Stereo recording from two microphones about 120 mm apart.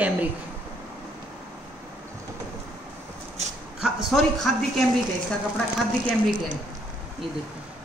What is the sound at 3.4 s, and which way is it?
Dog, 65° right (ahead or behind).